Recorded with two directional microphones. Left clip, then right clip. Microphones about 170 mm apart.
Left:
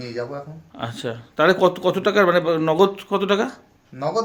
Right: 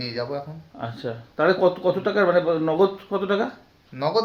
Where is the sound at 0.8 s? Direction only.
55° left (ahead or behind).